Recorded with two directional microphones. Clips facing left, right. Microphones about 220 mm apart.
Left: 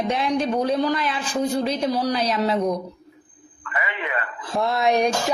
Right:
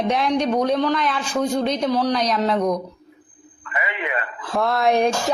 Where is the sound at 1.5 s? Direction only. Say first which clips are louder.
Right 3 dB; 5° left (ahead or behind).